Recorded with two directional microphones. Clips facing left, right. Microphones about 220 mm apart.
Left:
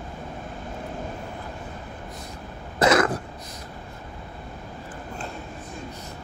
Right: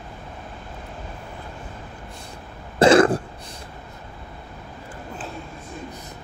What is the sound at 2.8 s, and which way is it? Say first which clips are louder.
Throat clearing: right 6 dB; 30° right (ahead or behind).